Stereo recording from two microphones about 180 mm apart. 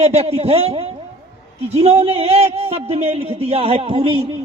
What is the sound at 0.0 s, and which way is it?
A man's voice, 35° right (ahead or behind).